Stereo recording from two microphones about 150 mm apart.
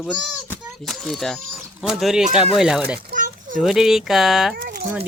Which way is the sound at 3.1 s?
60° right (ahead or behind).